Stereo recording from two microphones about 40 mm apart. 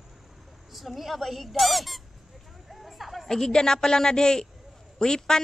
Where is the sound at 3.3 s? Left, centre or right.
Centre.